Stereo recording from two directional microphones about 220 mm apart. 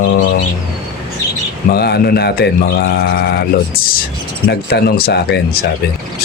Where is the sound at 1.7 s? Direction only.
45° left (ahead or behind).